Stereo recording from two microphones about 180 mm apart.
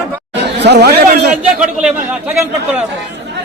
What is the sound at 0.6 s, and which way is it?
Speech, 70° right (ahead or behind).